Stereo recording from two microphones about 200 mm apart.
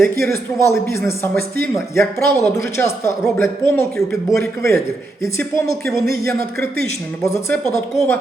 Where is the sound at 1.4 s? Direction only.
50° right (ahead or behind).